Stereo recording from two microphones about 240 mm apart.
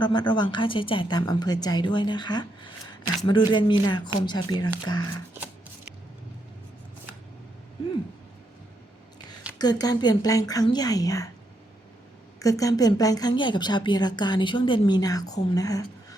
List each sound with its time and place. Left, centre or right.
0.0 s a woman's voice: centre
9.6 s a woman's voice: centre
12.4 s a woman's voice: centre